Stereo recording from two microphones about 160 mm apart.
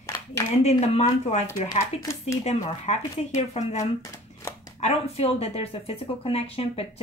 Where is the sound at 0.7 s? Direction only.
40° left (ahead or behind).